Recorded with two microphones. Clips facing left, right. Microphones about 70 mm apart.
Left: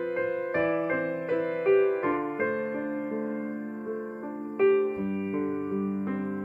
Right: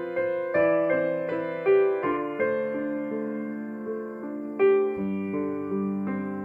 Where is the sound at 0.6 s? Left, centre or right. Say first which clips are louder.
Right 6 dB; centre.